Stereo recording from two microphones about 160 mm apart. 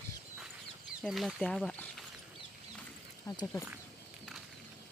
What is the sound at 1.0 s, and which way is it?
Speech, centre (ahead or behind).